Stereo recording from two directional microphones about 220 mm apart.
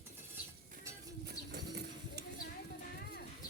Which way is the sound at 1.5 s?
45° right (ahead or behind).